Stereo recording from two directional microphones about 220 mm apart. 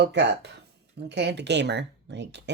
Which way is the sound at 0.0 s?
50° right (ahead or behind).